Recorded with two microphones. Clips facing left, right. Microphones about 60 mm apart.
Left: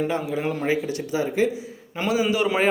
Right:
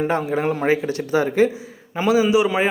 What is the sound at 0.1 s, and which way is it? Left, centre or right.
A man's voice, right.